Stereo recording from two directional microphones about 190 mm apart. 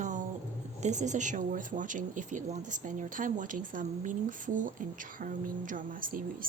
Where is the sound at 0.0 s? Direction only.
40° right (ahead or behind).